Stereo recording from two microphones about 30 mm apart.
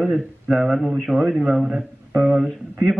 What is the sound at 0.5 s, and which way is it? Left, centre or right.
Speech, centre.